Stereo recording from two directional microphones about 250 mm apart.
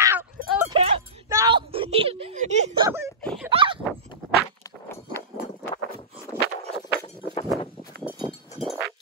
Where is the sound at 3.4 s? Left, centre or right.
Centre.